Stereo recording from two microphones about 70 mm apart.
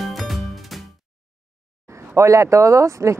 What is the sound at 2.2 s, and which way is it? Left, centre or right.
Speech, right.